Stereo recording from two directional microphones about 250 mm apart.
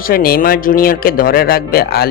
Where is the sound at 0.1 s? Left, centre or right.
Left.